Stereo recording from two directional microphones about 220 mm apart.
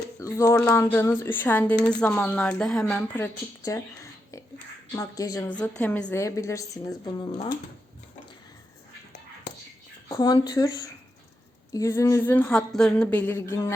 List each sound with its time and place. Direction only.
0.2 s a woman's voice: 15° left (ahead or behind)
10.1 s a woman's voice: 15° left (ahead or behind)